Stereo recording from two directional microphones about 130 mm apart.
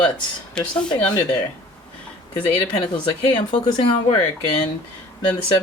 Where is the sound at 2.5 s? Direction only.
40° left (ahead or behind).